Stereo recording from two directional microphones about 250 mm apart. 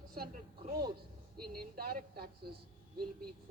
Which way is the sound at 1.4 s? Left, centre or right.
Right.